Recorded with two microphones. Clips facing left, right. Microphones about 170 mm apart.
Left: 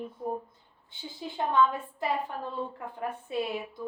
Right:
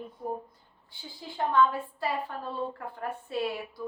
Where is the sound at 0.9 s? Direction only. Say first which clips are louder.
Left 1 dB; 20° left (ahead or behind).